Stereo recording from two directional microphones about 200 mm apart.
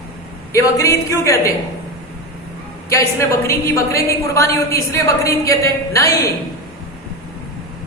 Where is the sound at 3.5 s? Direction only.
15° left (ahead or behind).